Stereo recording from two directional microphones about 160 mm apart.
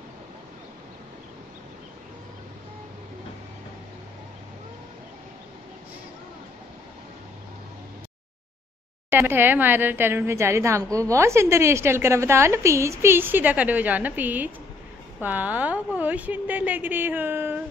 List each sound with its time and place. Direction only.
9.1 s a woman's voice: 15° right (ahead or behind)